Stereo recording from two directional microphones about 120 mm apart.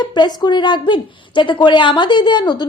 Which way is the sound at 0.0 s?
40° left (ahead or behind).